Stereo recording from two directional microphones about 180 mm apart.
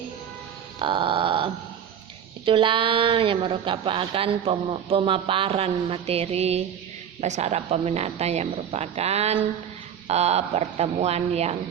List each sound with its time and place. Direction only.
0.8 s grunt: 30° right (ahead or behind)
2.4 s a woman's voice: 30° right (ahead or behind)